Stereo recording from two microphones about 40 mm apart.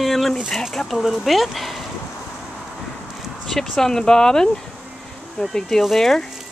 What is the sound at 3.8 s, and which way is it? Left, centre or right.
Speech, centre.